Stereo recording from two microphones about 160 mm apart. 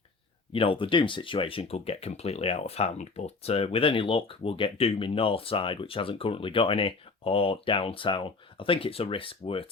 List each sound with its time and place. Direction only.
0.5 s speech: 35° left (ahead or behind)